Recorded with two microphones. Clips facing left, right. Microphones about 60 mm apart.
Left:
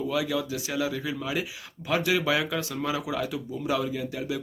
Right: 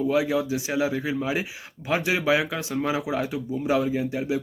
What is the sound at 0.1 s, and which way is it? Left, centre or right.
Speech, right.